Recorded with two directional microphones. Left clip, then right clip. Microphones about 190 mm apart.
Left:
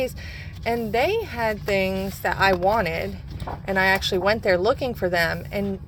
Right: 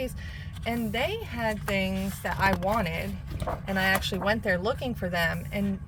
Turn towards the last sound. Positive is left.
turn(degrees=15)  # may be behind; listen again after turning